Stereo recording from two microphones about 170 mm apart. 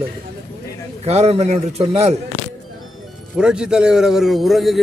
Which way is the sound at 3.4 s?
5° right (ahead or behind).